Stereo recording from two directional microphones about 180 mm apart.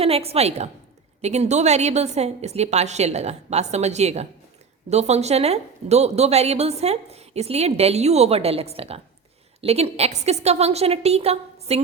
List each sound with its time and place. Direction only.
0.0 s a woman's voice: 35° right (ahead or behind)